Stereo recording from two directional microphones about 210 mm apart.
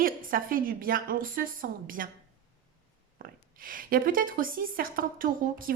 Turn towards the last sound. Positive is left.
turn(degrees=-40)  # may be behind; listen again after turning